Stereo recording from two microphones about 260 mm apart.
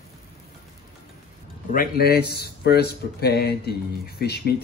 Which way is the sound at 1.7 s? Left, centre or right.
Left.